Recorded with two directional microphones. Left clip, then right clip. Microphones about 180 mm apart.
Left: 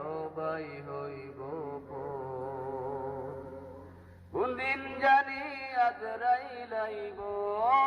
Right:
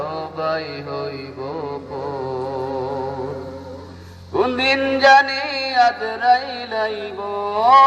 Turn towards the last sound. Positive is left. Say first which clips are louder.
# right 14 dB
turn(degrees=-30)  # may be behind; listen again after turning